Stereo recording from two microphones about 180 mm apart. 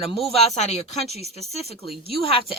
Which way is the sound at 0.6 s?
40° left (ahead or behind).